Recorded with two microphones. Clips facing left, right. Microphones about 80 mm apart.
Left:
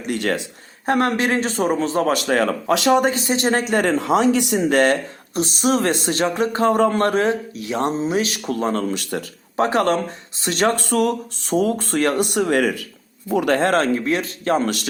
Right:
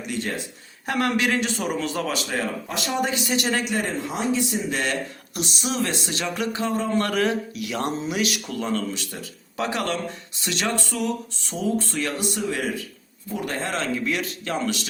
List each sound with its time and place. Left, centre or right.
0.1 s speech: left
0.9 s speech: left
2.1 s speech: left
3.0 s speech: left
3.8 s speech: left
5.3 s speech: left
6.7 s speech: left
7.0 s speech: left
9.6 s speech: left